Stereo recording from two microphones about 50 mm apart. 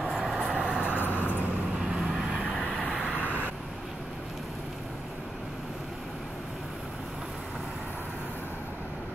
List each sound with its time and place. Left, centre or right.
0.0 s vehicle: centre
0.4 s vehicle: centre
0.9 s vehicle: left
2.1 s vehicle: centre